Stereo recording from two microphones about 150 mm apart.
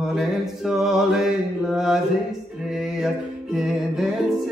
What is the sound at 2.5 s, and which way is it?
Music, centre (ahead or behind).